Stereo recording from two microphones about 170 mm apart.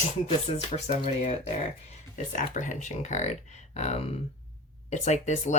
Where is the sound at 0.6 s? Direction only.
40° left (ahead or behind).